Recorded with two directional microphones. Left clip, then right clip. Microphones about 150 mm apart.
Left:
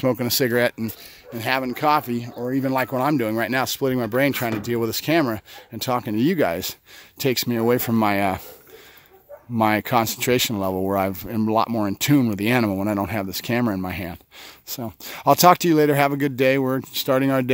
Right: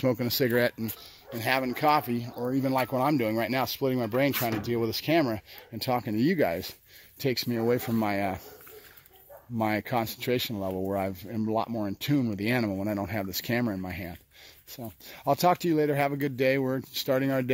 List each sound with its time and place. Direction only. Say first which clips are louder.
0.0 s speech: left 6 dB; 25° left (ahead or behind)
9.6 s speech: left 9 dB; 35° left (ahead or behind)
11.0 s speech: left 8 dB; 35° left (ahead or behind)
14.7 s speech: left 10 dB; 45° left (ahead or behind); by 17.5 s 30° left (ahead or behind)